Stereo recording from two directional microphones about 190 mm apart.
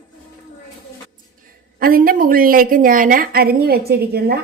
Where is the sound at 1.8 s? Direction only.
50° right (ahead or behind).